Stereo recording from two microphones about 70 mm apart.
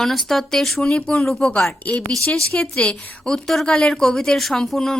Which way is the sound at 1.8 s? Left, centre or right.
Centre.